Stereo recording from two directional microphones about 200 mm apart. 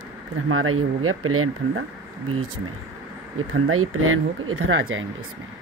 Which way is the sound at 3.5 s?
90° right.